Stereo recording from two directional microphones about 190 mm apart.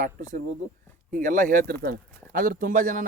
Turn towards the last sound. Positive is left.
turn(degrees=-45)  # may be behind; listen again after turning